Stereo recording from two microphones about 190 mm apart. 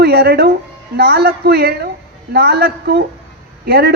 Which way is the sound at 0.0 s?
55° right (ahead or behind).